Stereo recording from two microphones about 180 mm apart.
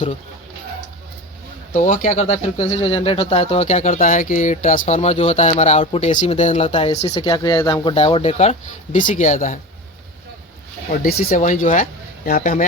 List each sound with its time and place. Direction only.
1.7 s speech: 45° left (ahead or behind)
7.2 s speech: 25° left (ahead or behind); by 9.6 s 45° left (ahead or behind)
11.3 s speech: 45° left (ahead or behind)